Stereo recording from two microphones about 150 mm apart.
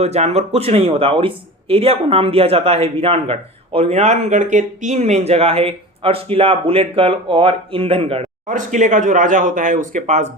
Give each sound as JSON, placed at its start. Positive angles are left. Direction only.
{"t": 0.0, "sound": "speech", "side_deg": -45}
{"t": 8.4, "sound": "speech", "side_deg": -55}